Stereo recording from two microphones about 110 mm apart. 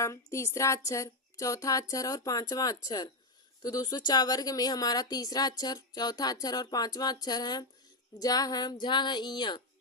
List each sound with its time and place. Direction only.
0.0 s speech: 25° left (ahead or behind)